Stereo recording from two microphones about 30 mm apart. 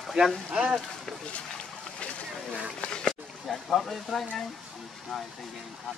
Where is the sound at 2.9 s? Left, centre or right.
Left.